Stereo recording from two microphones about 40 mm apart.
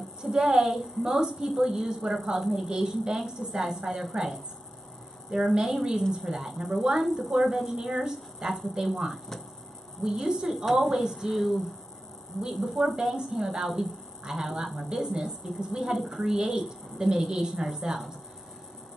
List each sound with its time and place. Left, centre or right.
0.2 s a woman's voice: centre
2.7 s a woman's voice: centre
10.7 s a woman's voice: centre
12.5 s a woman's voice: centre